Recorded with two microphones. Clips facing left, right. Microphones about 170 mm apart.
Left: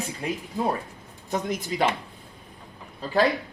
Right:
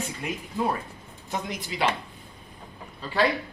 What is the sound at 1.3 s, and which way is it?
Speech, 45° left (ahead or behind).